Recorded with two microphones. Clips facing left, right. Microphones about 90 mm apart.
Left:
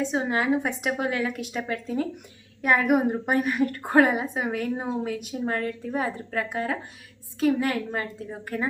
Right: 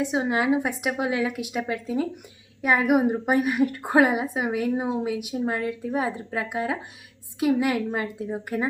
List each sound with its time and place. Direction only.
0.0 s a woman's voice: 10° right (ahead or behind)